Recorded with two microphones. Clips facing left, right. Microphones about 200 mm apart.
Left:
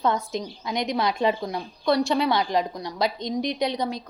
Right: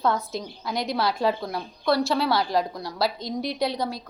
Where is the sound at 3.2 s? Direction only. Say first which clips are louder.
Left 1 dB; 20° left (ahead or behind).